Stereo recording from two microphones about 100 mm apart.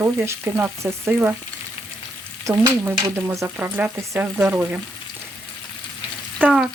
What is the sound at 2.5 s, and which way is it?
Frying, 30° right (ahead or behind).